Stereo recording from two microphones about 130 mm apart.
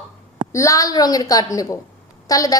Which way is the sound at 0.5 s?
25° left (ahead or behind).